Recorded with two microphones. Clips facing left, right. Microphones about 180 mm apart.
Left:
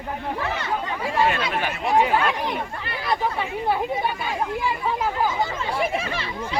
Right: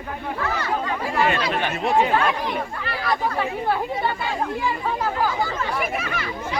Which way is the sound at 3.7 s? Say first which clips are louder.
Even; 15° left (ahead or behind).